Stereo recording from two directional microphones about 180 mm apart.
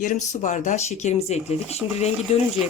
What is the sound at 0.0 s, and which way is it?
Speech, 45° left (ahead or behind).